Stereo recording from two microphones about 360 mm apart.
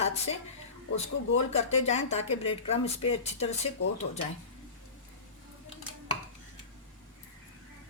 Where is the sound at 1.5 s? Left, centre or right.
Centre.